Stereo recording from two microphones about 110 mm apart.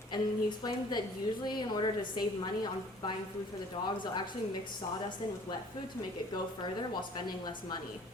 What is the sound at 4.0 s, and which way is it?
Speech, 40° left (ahead or behind).